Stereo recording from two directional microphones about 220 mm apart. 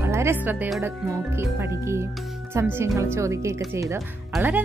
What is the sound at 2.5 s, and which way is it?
Speech, 10° right (ahead or behind).